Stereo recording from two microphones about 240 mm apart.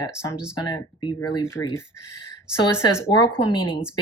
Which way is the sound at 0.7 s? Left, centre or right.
Centre.